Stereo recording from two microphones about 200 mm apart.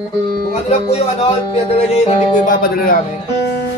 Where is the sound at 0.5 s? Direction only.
30° left (ahead or behind).